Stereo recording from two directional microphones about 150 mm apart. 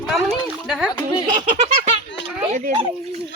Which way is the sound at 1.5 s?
50° right (ahead or behind).